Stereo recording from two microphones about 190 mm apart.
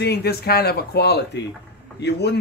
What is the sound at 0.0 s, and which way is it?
Speech, 60° left (ahead or behind).